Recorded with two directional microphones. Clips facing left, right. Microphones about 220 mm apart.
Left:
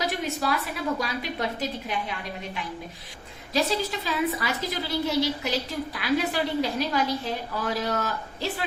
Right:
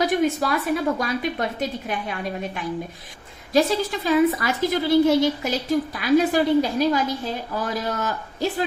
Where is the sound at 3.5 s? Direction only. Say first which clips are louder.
Right 6 dB; 50° right (ahead or behind).